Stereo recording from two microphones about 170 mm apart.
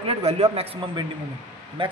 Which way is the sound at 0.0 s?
35° right (ahead or behind).